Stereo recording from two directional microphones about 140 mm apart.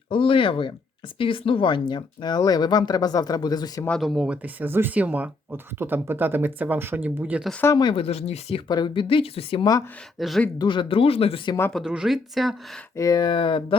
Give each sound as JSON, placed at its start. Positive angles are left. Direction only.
{"t": 0.1, "sound": "speech", "side_deg": 40}
{"t": 3.8, "sound": "speech", "side_deg": 0}
{"t": 4.4, "sound": "speech", "side_deg": -15}
{"t": 7.8, "sound": "speech", "side_deg": 35}
{"t": 8.0, "sound": "speech", "side_deg": 45}
{"t": 10.2, "sound": "speech", "side_deg": 0}
{"t": 10.6, "sound": "speech", "side_deg": 35}
{"t": 11.7, "sound": "speech", "side_deg": -5}
{"t": 13.0, "sound": "speech", "side_deg": 25}